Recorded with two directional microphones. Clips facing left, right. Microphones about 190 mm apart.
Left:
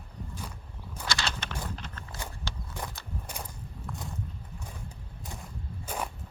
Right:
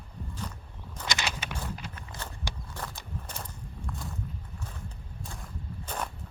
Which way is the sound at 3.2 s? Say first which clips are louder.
Left 1 dB; 10° left (ahead or behind).